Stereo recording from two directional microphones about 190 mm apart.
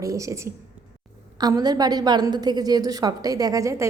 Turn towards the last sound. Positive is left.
turn(degrees=-15)  # may be behind; listen again after turning